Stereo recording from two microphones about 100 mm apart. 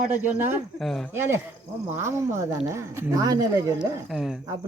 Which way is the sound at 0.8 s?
5° left (ahead or behind).